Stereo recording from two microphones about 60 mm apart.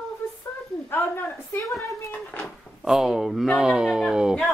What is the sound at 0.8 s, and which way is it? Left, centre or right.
Speech, left.